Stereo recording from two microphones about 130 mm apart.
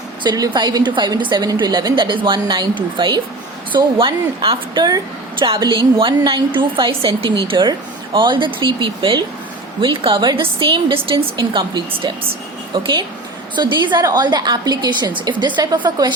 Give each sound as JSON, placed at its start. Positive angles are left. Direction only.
{"t": 0.2, "sound": "a woman's voice", "side_deg": -30}